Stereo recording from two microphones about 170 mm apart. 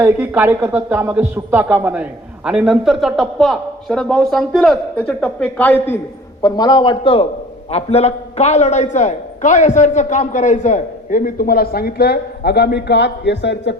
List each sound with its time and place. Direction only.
0.0 s speech: 10° right (ahead or behind); by 6.0 s 10° left (ahead or behind)
6.4 s a man's voice: 25° left (ahead or behind); by 13.7 s 90° left